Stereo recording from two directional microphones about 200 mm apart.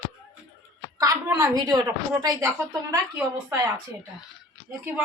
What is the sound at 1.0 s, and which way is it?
A woman's voice, 15° right (ahead or behind).